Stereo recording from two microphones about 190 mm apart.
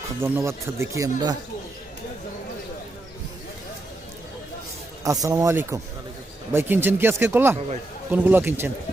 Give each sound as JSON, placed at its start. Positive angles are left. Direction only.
{"t": 0.2, "sound": "speech", "side_deg": -15}
{"t": 5.0, "sound": "speech", "side_deg": -15}